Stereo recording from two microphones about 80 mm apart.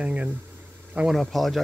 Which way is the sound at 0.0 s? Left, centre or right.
Centre.